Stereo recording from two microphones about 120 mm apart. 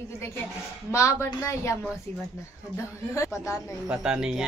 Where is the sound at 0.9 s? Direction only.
25° left (ahead or behind).